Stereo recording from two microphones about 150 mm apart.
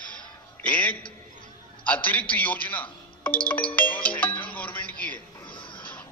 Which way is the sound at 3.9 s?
10° left (ahead or behind).